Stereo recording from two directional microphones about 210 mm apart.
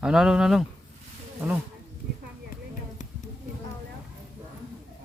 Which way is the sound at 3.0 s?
35° left (ahead or behind).